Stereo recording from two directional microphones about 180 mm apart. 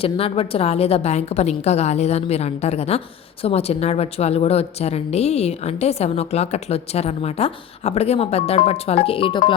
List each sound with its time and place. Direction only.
0.0 s a woman's voice: 30° left (ahead or behind)